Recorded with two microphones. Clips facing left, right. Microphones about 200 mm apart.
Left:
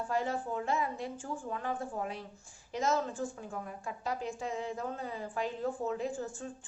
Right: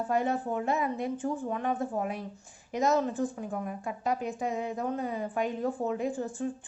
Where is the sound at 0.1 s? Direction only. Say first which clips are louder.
Right 5 dB; 20° right (ahead or behind).